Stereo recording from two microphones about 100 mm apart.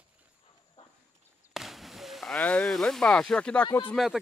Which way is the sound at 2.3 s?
15° left (ahead or behind).